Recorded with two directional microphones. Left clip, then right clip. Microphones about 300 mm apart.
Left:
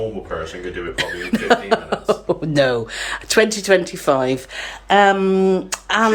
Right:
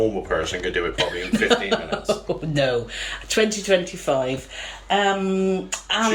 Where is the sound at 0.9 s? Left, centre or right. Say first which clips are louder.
Even; centre.